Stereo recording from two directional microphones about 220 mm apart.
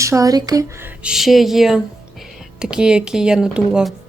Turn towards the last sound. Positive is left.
turn(degrees=-5)  # may be behind; listen again after turning